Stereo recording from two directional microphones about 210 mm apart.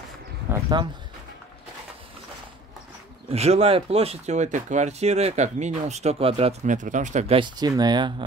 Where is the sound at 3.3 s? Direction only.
30° right (ahead or behind).